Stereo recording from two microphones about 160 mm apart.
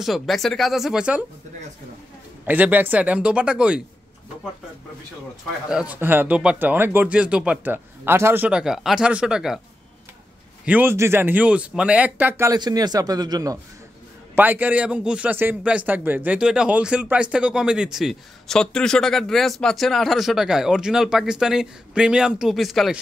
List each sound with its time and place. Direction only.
0.0 s a man's voice: centre (ahead or behind)
2.4 s speech: 10° right (ahead or behind)
5.7 s speech: 5° right (ahead or behind)
10.6 s speech: 10° right (ahead or behind)
12.5 s speech: 25° right (ahead or behind)
14.3 s a man's voice: 10° right (ahead or behind)